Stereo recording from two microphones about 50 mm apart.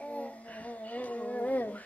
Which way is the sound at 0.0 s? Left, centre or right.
Left.